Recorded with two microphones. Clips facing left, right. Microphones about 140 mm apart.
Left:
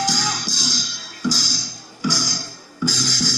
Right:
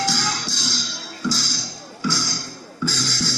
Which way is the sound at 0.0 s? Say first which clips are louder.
Left 1 dB; 15° left (ahead or behind).